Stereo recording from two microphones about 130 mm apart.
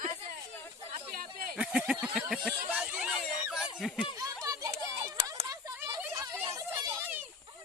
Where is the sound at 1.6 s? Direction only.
5° right (ahead or behind).